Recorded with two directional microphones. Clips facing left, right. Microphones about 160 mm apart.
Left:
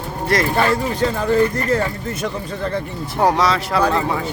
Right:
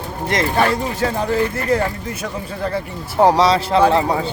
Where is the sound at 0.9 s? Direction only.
5° right (ahead or behind).